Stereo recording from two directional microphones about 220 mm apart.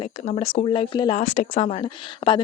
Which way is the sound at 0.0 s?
30° left (ahead or behind).